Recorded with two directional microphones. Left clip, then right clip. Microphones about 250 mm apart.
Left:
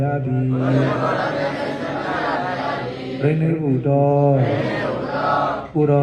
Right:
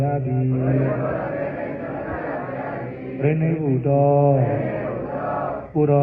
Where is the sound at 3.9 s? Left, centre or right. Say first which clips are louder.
Even; left.